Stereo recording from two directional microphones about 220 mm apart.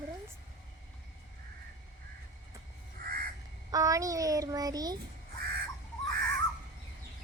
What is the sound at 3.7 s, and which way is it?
A woman's voice, 15° right (ahead or behind).